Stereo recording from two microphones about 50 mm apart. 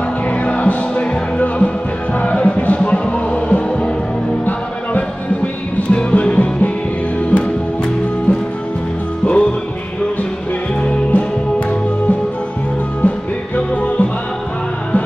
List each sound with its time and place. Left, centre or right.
0.3 s music: left
10.8 s music: left
13.6 s music: left